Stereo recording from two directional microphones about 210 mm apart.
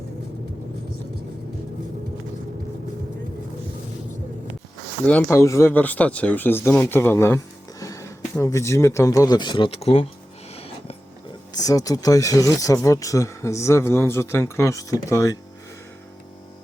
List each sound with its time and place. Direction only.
5.0 s speech: 10° left (ahead or behind); by 10.1 s 30° left (ahead or behind)
10.5 s a sound: 30° left (ahead or behind)
11.5 s speech: 15° left (ahead or behind)